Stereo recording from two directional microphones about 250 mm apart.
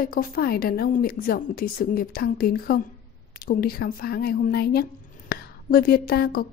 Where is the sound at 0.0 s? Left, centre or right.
Left.